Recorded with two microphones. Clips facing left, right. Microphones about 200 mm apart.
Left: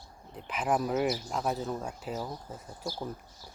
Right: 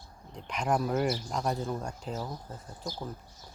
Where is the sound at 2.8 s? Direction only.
20° right (ahead or behind).